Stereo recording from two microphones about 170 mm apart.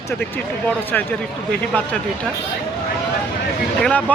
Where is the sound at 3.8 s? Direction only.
10° left (ahead or behind).